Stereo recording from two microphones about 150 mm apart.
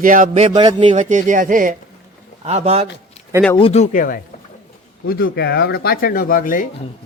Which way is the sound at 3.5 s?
45° left (ahead or behind).